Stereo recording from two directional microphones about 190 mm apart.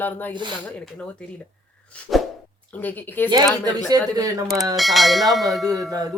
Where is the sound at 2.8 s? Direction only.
10° left (ahead or behind).